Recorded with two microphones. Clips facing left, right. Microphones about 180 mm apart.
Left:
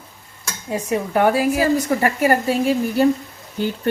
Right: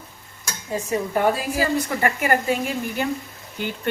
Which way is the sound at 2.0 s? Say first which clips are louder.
Left 4 dB; 35° left (ahead or behind).